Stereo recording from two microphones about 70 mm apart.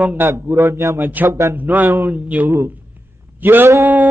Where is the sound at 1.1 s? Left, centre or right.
Right.